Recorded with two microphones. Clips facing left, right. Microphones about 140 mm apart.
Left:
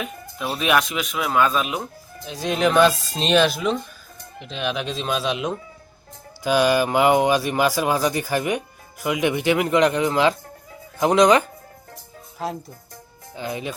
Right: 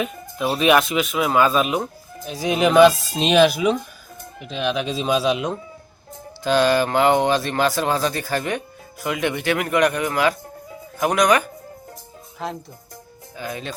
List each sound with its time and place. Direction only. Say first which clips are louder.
0.0 s speech: right 5 dB; centre (ahead or behind)
6.4 s speech: right 1 dB; 10° left (ahead or behind)
12.4 s speech: left 1 dB; 5° left (ahead or behind)
13.3 s speech: left 2 dB; 20° left (ahead or behind)